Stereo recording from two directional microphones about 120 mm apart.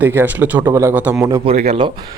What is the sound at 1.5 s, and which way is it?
Speech, 65° right (ahead or behind).